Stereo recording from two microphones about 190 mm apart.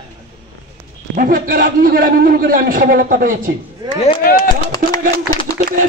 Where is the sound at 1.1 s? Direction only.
45° right (ahead or behind).